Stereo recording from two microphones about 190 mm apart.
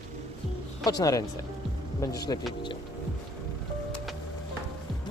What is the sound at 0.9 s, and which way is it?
Speech, 20° left (ahead or behind).